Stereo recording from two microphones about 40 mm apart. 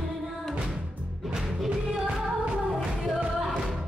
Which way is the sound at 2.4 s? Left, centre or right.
Right.